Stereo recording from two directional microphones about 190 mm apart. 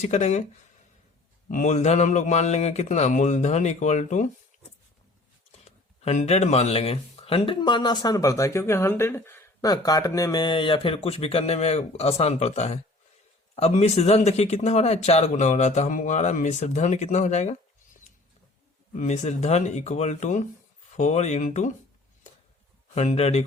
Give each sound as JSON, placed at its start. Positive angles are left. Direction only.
{"t": 0.0, "sound": "speech", "side_deg": 35}
{"t": 1.5, "sound": "speech", "side_deg": 40}
{"t": 4.5, "sound": "a sound", "side_deg": 40}
{"t": 6.0, "sound": "speech", "side_deg": 35}
{"t": 18.9, "sound": "speech", "side_deg": 40}
{"t": 23.0, "sound": "speech", "side_deg": 35}